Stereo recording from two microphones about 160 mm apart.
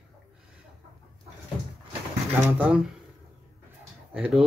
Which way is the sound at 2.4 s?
10° right (ahead or behind).